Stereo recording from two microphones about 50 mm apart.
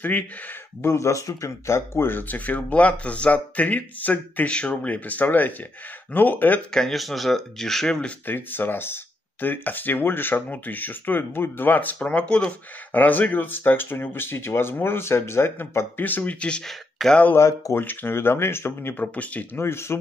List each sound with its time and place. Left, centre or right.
0.8 s speech: left
2.0 s speech: left
2.3 s speech: left
4.5 s speech: left
6.7 s speech: centre
8.3 s speech: left
12.9 s speech: left
16.0 s speech: left
17.0 s speech: centre
17.4 s speech: left
17.7 s speech: left
19.1 s speech: left
19.6 s speech: left